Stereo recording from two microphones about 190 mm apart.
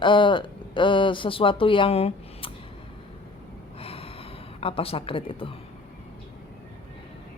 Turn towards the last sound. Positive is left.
turn(degrees=30)  # may be behind; listen again after turning